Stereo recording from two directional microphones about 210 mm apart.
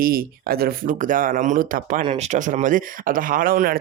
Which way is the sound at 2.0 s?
30° right (ahead or behind).